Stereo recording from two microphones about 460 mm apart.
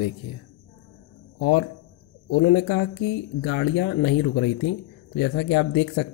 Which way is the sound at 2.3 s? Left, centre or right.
Left.